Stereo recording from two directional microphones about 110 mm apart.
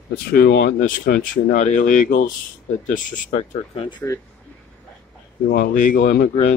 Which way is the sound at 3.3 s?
80° left.